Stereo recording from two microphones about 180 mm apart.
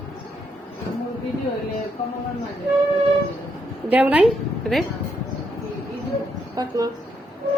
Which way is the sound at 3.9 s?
10° right (ahead or behind).